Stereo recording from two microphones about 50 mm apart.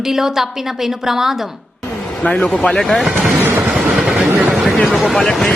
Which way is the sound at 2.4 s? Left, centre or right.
Centre.